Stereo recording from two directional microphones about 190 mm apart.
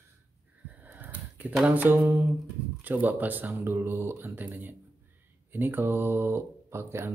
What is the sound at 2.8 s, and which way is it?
Speech, 10° right (ahead or behind).